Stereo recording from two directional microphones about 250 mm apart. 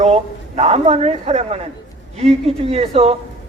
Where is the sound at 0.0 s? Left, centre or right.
Right.